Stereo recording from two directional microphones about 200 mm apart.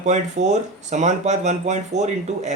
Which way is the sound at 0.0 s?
35° right (ahead or behind).